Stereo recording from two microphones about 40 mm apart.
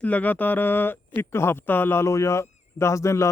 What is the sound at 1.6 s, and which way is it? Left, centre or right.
Speech, left.